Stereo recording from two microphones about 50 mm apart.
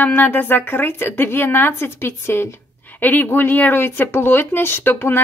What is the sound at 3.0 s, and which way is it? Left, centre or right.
Speech, left.